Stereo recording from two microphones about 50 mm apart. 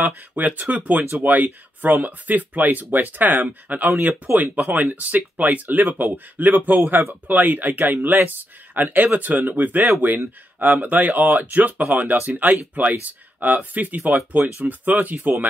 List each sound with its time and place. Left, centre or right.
0.4 s speech: right